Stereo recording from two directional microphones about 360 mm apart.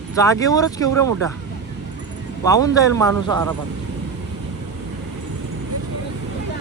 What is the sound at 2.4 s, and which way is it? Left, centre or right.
A man's voice, centre.